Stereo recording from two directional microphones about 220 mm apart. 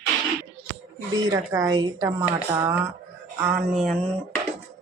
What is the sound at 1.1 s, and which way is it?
Speech, 15° right (ahead or behind).